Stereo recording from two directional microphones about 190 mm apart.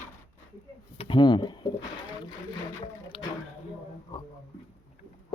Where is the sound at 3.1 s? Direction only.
30° left (ahead or behind).